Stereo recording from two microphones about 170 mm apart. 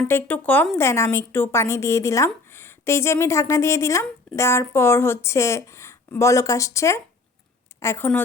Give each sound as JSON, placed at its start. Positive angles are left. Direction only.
{"t": 0.1, "sound": "speech", "side_deg": 10}